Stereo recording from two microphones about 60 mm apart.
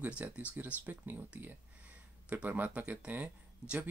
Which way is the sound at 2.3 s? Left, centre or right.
Right.